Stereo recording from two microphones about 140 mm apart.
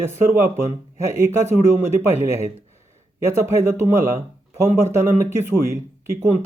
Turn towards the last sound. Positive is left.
turn(degrees=-20)  # may be behind; listen again after turning